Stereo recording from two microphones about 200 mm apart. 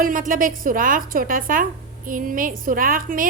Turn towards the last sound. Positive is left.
turn(degrees=-45)  # may be behind; listen again after turning